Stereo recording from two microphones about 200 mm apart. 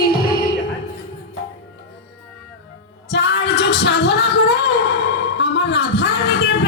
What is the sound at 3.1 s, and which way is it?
Music, 55° left (ahead or behind).